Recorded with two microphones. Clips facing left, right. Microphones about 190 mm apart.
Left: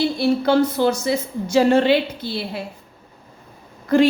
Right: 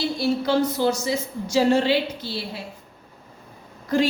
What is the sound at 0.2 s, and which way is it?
A woman's voice, 55° left (ahead or behind).